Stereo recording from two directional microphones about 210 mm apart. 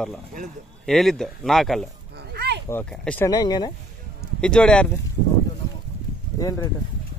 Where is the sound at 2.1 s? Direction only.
50° right (ahead or behind).